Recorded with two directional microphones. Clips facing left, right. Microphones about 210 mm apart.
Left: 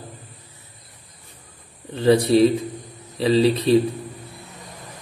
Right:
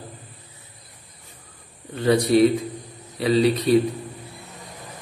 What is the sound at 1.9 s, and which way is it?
A man's voice, 30° left (ahead or behind).